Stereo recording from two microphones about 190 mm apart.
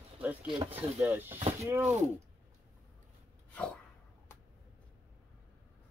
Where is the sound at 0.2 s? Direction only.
10° right (ahead or behind).